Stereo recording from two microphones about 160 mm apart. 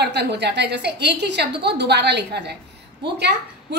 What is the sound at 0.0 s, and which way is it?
A woman's voice, 90° right.